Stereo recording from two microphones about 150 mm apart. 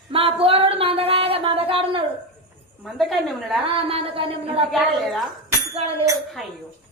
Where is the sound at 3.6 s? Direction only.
40° right (ahead or behind).